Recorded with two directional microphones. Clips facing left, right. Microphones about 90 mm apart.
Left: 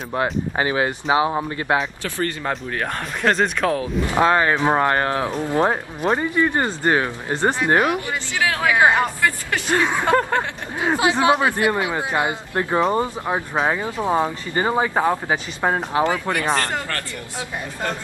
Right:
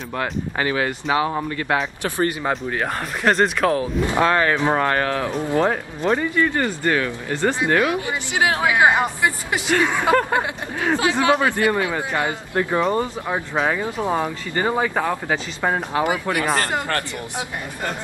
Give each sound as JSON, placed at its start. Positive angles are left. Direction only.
{"t": 0.1, "sound": "speech", "side_deg": 20}
{"t": 2.0, "sound": "speech", "side_deg": -20}
{"t": 2.4, "sound": "speech", "side_deg": -5}
{"t": 4.2, "sound": "speech", "side_deg": 20}
{"t": 8.1, "sound": "speech", "side_deg": -20}
{"t": 9.7, "sound": "speech", "side_deg": 20}
{"t": 16.0, "sound": "speech", "side_deg": -10}